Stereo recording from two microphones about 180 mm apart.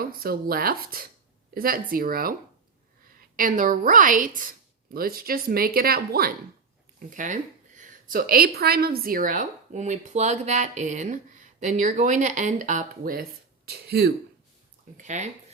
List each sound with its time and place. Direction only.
0.0 s a woman's voice: 55° right (ahead or behind)
3.3 s a woman's voice: 50° right (ahead or behind)
7.1 s a woman's voice: 45° right (ahead or behind)
13.7 s speech: 60° right (ahead or behind)
14.9 s speech: 40° right (ahead or behind)